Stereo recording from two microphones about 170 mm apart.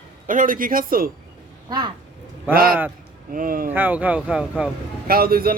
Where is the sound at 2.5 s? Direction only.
60° right (ahead or behind).